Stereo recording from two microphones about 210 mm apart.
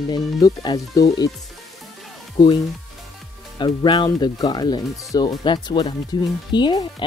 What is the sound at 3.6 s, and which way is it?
Speech, 20° left (ahead or behind).